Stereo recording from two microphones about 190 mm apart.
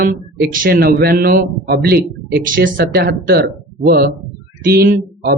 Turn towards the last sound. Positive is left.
turn(degrees=-55)  # may be behind; listen again after turning